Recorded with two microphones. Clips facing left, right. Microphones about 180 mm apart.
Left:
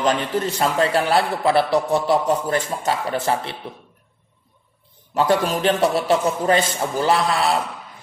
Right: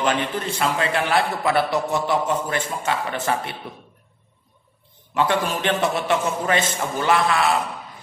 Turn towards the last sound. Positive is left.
turn(degrees=35)  # may be behind; listen again after turning